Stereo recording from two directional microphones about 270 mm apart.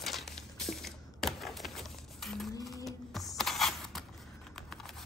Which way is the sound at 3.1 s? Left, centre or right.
Centre.